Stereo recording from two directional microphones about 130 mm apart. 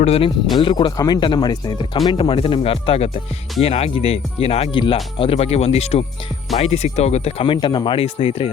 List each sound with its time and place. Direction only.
0.0 s speech: 50° left (ahead or behind)
0.6 s speech: 40° left (ahead or behind); by 7.4 s 55° left (ahead or behind)
7.4 s speech: 40° left (ahead or behind)